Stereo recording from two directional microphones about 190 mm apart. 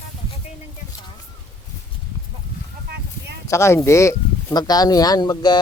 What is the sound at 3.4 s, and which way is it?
Speech, 15° left (ahead or behind).